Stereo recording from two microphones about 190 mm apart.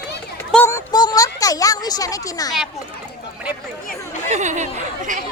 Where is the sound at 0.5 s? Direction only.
5° left (ahead or behind).